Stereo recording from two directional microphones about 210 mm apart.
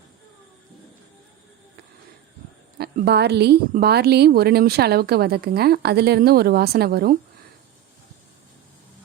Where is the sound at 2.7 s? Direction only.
50° right (ahead or behind).